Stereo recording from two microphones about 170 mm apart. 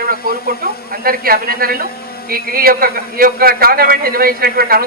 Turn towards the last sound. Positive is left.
turn(degrees=-60)  # may be behind; listen again after turning